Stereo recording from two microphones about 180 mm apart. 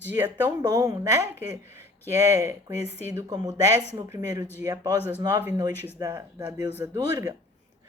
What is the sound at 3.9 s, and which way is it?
Speech, 15° right (ahead or behind).